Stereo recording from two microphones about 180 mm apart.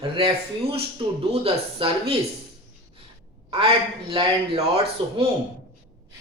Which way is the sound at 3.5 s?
30° right (ahead or behind).